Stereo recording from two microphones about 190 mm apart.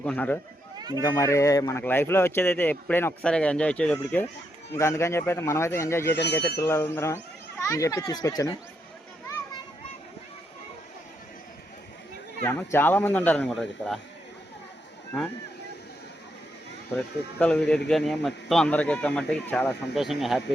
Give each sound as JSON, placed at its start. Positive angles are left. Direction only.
{"t": 0.0, "sound": "speech", "side_deg": 5}
{"t": 0.8, "sound": "run", "side_deg": -20}
{"t": 1.0, "sound": "a man's voice", "side_deg": 15}
{"t": 6.1, "sound": "speech", "side_deg": 60}
{"t": 6.6, "sound": "speech", "side_deg": 15}
{"t": 12.5, "sound": "speech", "side_deg": 10}
{"t": 17.4, "sound": "a man's voice", "side_deg": 5}